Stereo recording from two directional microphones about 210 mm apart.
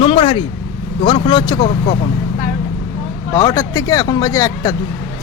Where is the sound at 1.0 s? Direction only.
20° left (ahead or behind).